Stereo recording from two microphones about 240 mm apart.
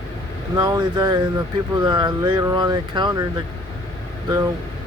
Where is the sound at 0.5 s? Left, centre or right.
Centre.